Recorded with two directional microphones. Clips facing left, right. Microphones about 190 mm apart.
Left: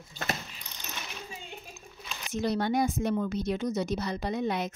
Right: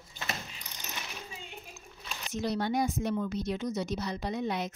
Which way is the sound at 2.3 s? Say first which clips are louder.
Left 3 dB; 55° left (ahead or behind).